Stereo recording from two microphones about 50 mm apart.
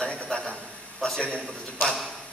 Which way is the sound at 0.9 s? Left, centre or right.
Centre.